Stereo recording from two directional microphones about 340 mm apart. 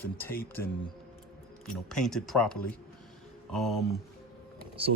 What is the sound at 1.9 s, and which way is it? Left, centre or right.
Speech, centre.